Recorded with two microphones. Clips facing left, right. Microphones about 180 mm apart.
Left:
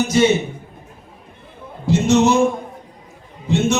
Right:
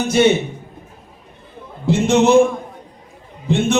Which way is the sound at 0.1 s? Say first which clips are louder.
Right 3 dB; 60° right (ahead or behind).